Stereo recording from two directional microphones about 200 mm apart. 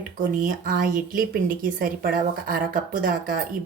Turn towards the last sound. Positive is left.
turn(degrees=-45)  # may be behind; listen again after turning